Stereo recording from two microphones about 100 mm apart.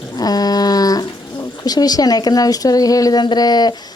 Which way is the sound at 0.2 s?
40° left (ahead or behind).